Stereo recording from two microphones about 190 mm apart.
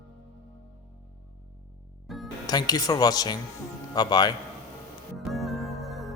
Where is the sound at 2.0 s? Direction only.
Centre (ahead or behind).